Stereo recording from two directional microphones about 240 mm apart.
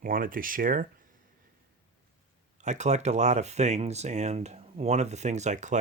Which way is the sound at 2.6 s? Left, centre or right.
Right.